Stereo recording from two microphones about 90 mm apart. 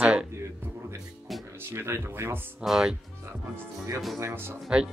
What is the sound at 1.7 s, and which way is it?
Speech, 25° right (ahead or behind).